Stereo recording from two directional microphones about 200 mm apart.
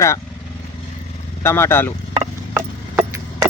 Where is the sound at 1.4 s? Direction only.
15° left (ahead or behind).